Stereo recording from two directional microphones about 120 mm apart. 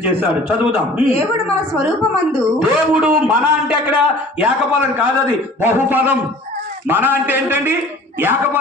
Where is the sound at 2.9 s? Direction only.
10° right (ahead or behind).